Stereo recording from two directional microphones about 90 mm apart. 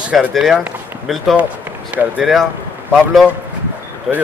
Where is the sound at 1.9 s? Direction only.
10° right (ahead or behind).